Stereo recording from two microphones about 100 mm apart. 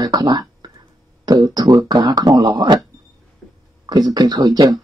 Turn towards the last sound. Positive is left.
turn(degrees=-40)  # may be behind; listen again after turning